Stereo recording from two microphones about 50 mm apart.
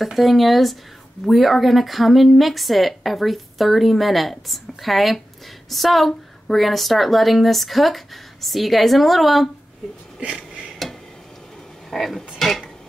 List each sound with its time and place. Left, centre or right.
0.0 s speech: centre
10.2 s a sound: centre
11.9 s speech: centre